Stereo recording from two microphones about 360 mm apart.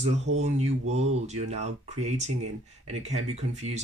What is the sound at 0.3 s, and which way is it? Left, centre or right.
Speech, right.